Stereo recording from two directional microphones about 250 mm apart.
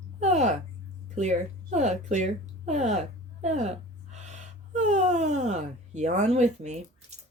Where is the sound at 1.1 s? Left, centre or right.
Right.